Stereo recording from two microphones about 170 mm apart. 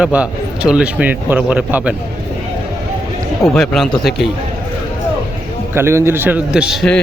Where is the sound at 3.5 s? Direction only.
5° left (ahead or behind).